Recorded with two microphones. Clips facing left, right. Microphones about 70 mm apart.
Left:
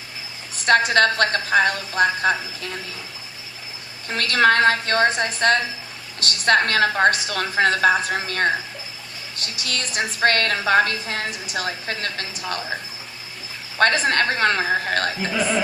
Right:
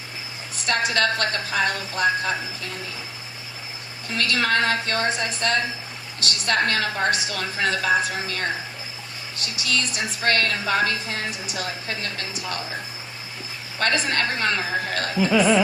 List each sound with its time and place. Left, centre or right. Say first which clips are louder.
0.6 s a woman's voice: left 6 dB; left
4.1 s a woman's voice: left 5 dB; left
13.7 s a woman's voice: left 5 dB; left